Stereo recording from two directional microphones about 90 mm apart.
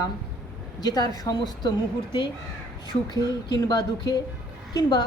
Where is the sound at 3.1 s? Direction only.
50° left (ahead or behind).